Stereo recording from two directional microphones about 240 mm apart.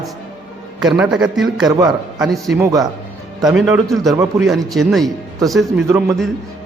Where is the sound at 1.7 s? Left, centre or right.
Centre.